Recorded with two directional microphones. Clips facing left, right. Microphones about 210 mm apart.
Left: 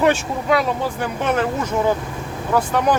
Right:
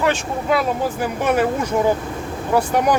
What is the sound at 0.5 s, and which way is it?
Speech, 5° right (ahead or behind).